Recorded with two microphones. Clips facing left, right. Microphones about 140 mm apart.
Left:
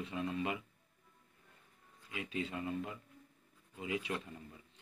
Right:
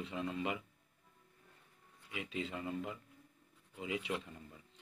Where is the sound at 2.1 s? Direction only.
Centre (ahead or behind).